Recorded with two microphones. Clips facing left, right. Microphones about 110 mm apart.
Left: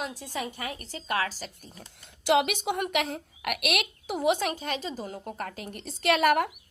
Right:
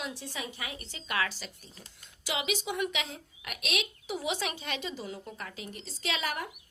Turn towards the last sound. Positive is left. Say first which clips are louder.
# left 12 dB
turn(degrees=65)  # may be behind; listen again after turning